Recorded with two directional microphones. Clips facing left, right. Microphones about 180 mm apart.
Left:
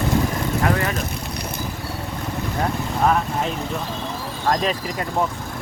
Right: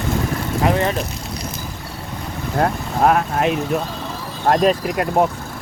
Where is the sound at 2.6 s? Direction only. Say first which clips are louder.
Right 4 dB; 65° right (ahead or behind).